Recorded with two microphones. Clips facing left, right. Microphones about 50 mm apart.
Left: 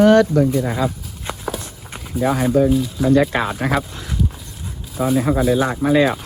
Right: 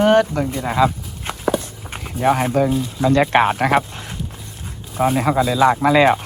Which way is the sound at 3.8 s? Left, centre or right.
Right.